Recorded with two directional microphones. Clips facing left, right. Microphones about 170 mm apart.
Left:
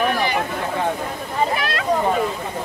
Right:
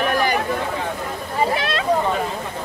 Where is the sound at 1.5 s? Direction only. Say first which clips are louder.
Right 1 dB; 25° right (ahead or behind).